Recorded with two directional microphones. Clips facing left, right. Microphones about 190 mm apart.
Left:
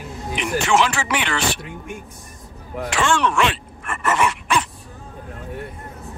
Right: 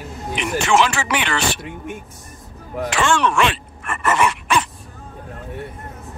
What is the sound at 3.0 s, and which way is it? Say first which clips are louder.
Groan: right 1 dB; 80° right.